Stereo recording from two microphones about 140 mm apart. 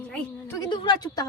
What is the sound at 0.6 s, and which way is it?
Speech, 30° left (ahead or behind).